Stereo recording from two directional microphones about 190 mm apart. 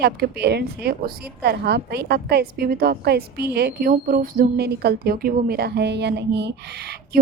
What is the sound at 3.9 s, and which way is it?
A woman's voice, 45° right (ahead or behind).